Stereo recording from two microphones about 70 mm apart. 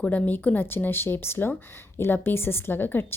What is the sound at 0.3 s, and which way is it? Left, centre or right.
A woman's voice, left.